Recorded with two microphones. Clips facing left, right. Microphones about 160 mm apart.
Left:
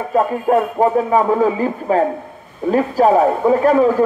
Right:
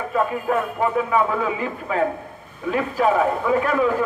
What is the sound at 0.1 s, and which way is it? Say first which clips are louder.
A man's voice: left 7 dB; 40° left (ahead or behind).